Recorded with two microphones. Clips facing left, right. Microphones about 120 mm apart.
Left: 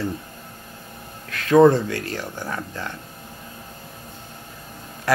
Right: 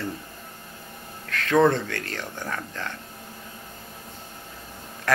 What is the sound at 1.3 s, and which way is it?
Speech, 10° left (ahead or behind).